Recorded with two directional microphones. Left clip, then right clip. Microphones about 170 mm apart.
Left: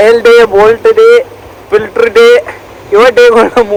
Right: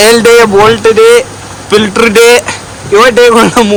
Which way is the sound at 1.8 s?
20° right (ahead or behind).